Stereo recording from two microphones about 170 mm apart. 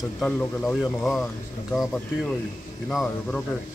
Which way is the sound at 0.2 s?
10° left (ahead or behind).